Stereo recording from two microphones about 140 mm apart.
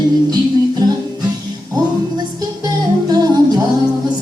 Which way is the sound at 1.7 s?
25° right (ahead or behind).